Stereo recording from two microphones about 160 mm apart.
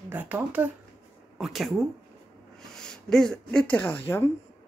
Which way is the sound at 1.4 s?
Centre (ahead or behind).